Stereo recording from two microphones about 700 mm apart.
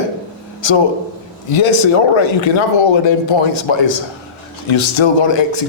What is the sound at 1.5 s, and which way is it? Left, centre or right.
Speech, left.